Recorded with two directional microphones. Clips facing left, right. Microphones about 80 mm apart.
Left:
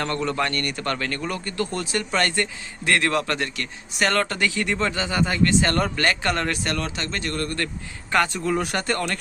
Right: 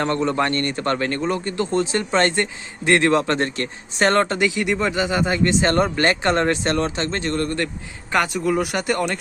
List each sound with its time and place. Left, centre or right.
0.0 s a man's voice: right